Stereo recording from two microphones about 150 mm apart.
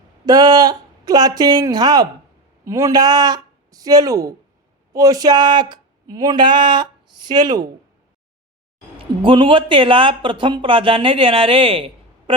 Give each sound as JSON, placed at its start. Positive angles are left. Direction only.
{"t": 0.3, "sound": "speech", "side_deg": -25}
{"t": 9.2, "sound": "speech", "side_deg": -35}